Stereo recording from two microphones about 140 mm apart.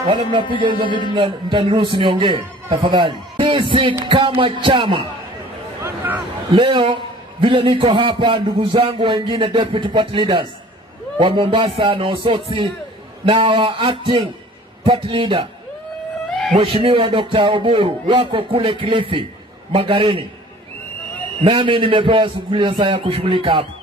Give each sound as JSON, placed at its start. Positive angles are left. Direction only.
{"t": 0.0, "sound": "a man's voice", "side_deg": -40}
{"t": 5.8, "sound": "a sound", "side_deg": -20}
{"t": 6.5, "sound": "a man's voice", "side_deg": -35}
{"t": 16.3, "sound": "cat", "side_deg": 0}
{"t": 16.5, "sound": "a man's voice", "side_deg": -40}
{"t": 21.5, "sound": "a man's voice", "side_deg": -35}